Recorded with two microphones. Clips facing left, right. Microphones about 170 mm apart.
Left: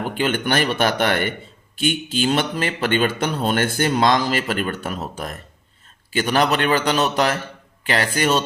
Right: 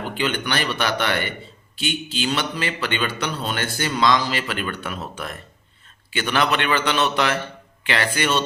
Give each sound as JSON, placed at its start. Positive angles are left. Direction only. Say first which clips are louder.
{"t": 0.1, "sound": "a man's voice", "louder": "left 3 dB", "side_deg": 45}